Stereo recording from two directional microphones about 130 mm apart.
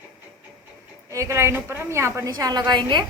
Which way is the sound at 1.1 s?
20° right (ahead or behind).